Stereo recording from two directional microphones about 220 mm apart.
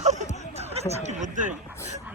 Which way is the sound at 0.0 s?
30° right (ahead or behind).